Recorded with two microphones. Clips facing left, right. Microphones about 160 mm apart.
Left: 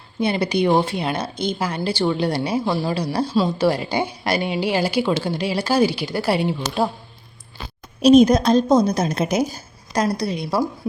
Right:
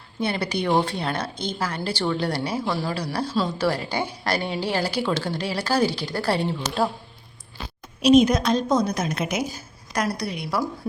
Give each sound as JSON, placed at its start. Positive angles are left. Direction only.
{"t": 0.2, "sound": "speech", "side_deg": 15}
{"t": 8.0, "sound": "a woman's voice", "side_deg": 35}